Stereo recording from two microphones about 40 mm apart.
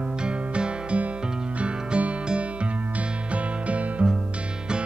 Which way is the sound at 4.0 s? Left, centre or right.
Right.